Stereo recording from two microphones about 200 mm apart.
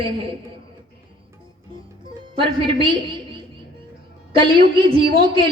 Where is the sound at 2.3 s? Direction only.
25° right (ahead or behind).